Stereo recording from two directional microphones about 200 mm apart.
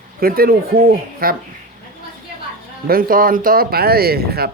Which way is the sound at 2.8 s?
45° right (ahead or behind).